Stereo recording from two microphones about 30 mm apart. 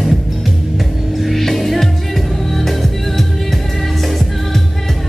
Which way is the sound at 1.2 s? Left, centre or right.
Centre.